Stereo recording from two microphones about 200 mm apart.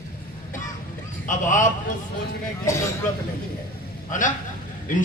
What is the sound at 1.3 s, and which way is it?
Speech, 40° left (ahead or behind).